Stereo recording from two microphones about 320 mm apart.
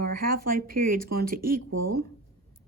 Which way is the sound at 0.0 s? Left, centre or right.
Right.